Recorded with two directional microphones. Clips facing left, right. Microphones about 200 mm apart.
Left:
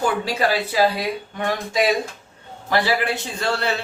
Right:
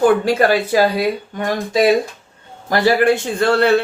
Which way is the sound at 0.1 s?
55° right (ahead or behind).